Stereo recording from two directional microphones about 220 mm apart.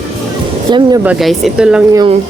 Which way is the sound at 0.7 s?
20° right (ahead or behind).